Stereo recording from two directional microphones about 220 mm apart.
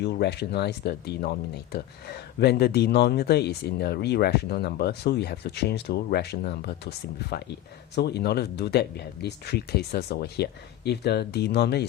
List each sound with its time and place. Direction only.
0.0 s speech: 50° left (ahead or behind)